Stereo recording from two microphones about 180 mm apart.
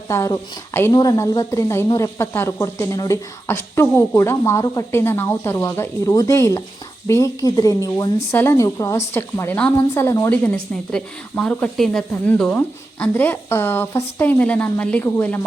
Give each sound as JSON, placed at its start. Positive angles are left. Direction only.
{"t": 0.1, "sound": "speech", "side_deg": 15}